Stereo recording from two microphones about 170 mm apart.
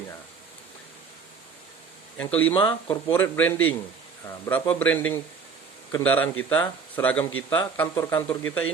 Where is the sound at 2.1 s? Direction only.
10° left (ahead or behind).